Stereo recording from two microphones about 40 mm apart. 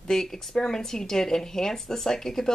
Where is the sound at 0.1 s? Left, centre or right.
Centre.